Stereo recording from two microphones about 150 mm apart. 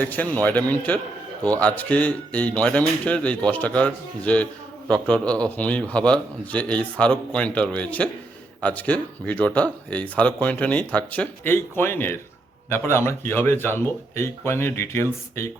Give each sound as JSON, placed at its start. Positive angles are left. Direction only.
{"t": 0.0, "sound": "speech", "side_deg": 10}